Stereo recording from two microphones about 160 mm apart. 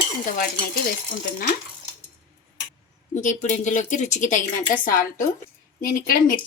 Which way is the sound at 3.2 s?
50° left (ahead or behind).